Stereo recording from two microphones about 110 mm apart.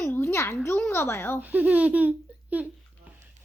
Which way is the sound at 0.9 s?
20° left (ahead or behind).